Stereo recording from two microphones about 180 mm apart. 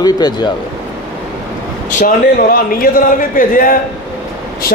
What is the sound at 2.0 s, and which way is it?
A man's voice, 50° left (ahead or behind).